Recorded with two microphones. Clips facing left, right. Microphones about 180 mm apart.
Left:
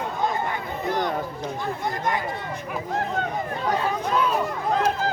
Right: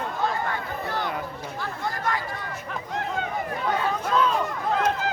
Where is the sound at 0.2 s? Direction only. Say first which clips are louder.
Left 1 dB; 20° left (ahead or behind).